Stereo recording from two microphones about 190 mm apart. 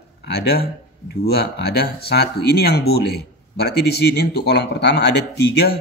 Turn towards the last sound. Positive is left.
turn(degrees=60)  # may be behind; listen again after turning